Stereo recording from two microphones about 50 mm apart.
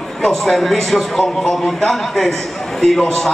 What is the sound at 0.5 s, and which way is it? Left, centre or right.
A man's voice, centre.